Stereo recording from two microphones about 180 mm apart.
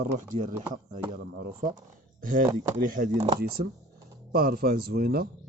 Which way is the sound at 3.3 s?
60° right (ahead or behind).